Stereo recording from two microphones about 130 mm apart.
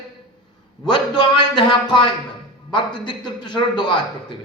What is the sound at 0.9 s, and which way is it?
A man's voice, 35° left (ahead or behind).